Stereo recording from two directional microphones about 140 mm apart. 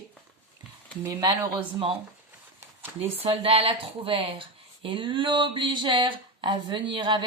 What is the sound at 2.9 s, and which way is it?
Speech, 45° right (ahead or behind).